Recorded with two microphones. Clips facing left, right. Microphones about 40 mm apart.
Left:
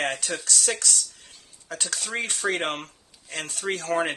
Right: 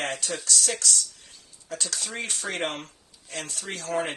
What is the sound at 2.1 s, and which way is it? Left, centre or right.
Speech, left.